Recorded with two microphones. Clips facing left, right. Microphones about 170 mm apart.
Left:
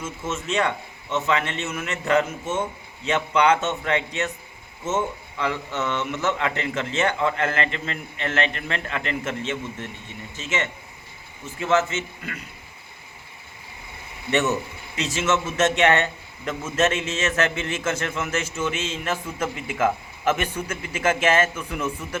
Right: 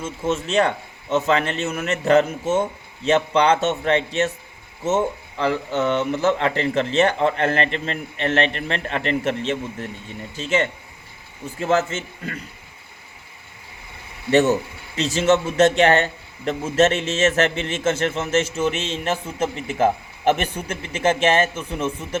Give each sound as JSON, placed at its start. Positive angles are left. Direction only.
{"t": 0.0, "sound": "a man's voice", "side_deg": -30}
{"t": 14.3, "sound": "a man's voice", "side_deg": -35}